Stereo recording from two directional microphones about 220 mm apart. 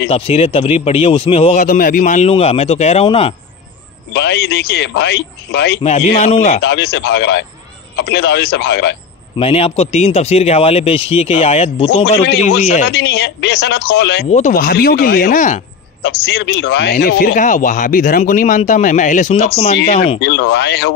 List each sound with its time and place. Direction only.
0.1 s speech: 25° left (ahead or behind)
4.1 s speech: 50° left (ahead or behind)
5.8 s speech: 30° left (ahead or behind)
6.6 s speech: 50° left (ahead or behind)
9.4 s speech: 25° left (ahead or behind)
12.8 s speech: 50° left (ahead or behind)
14.3 s speech: 35° left (ahead or behind)
16.6 s speech: 50° left (ahead or behind); by 19.7 s 30° left (ahead or behind)
20.2 s speech: 50° left (ahead or behind)